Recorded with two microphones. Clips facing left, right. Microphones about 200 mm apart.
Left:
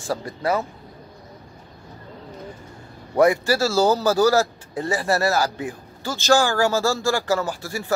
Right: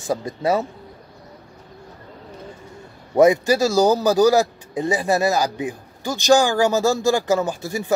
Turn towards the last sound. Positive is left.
turn(degrees=-20)  # may be behind; listen again after turning